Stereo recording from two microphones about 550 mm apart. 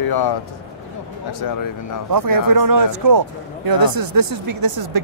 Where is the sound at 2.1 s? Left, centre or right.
Right.